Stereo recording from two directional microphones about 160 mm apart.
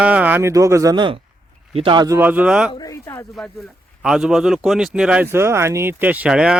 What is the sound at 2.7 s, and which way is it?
Speech, 20° left (ahead or behind).